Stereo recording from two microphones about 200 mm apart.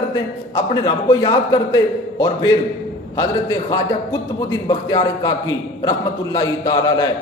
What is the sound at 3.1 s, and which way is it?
Speech, 20° left (ahead or behind).